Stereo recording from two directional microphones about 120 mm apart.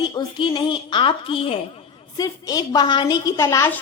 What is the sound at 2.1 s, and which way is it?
A woman's voice, 30° left (ahead or behind).